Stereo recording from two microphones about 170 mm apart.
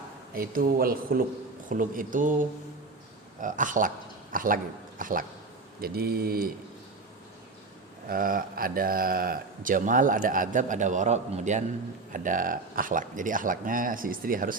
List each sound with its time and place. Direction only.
0.3 s a man's voice: 60° right (ahead or behind)
5.8 s speech: 65° right (ahead or behind)
8.0 s speech: 55° right (ahead or behind)